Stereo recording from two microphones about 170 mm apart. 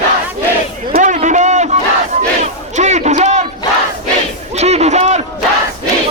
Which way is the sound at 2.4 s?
45° right (ahead or behind).